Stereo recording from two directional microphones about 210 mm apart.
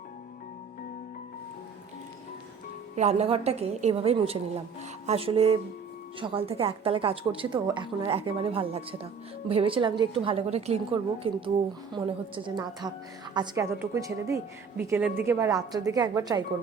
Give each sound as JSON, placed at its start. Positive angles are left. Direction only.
{"t": 2.9, "sound": "a woman's voice", "side_deg": -30}